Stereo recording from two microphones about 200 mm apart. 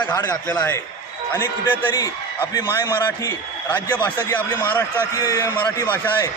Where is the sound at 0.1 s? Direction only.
10° left (ahead or behind).